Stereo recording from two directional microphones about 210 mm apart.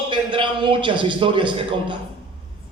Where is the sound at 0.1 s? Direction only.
25° right (ahead or behind).